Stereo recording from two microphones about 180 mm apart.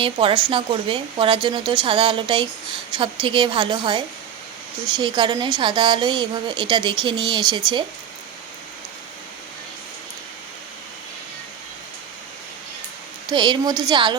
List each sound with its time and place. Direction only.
0.0 s a woman's voice: 30° right (ahead or behind)
13.2 s a woman's voice: 25° right (ahead or behind)